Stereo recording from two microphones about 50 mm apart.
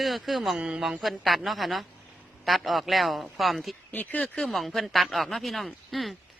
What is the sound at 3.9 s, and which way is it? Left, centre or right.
Speech, left.